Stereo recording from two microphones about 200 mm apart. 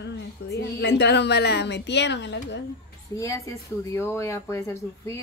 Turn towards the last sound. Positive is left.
turn(degrees=15)  # may be behind; listen again after turning